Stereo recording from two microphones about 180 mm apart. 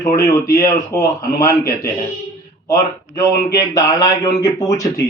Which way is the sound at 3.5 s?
20° left (ahead or behind).